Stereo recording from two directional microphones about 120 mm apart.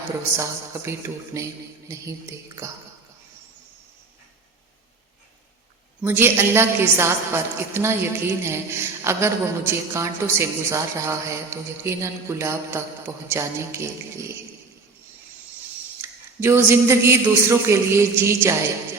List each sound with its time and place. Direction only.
0.3 s a woman's voice: 25° right (ahead or behind)
6.0 s a woman's voice: 20° right (ahead or behind)
16.0 s a woman's voice: 20° right (ahead or behind)